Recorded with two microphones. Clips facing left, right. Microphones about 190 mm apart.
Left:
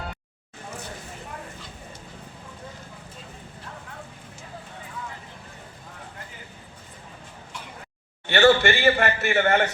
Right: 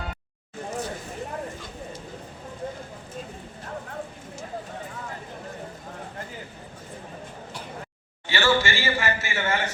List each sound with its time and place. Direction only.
8.3 s a man's voice: 60° left (ahead or behind)